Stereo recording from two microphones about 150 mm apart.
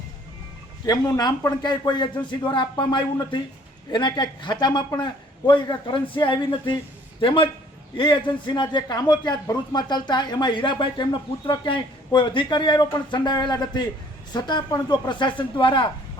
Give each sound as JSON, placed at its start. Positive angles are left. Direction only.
{"t": 0.9, "sound": "a man's voice", "side_deg": 25}